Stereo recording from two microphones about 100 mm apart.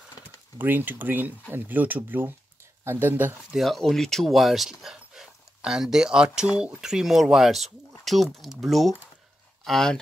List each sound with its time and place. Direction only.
0.6 s speech: 20° right (ahead or behind)
3.5 s speech: centre (ahead or behind)